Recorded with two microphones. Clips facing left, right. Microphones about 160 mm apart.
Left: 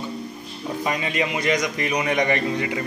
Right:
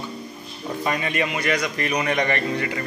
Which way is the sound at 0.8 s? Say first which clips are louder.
Right 1 dB; 15° left (ahead or behind).